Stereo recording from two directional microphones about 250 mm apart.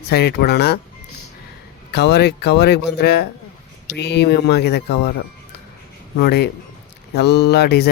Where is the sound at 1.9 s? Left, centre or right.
Left.